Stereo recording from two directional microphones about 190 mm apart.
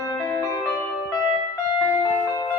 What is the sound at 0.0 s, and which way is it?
Music, 15° left (ahead or behind).